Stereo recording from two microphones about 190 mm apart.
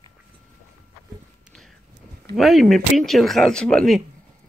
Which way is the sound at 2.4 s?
Centre (ahead or behind).